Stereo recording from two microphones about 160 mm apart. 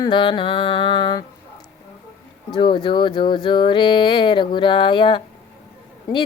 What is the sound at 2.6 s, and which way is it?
Speech, 30° left (ahead or behind).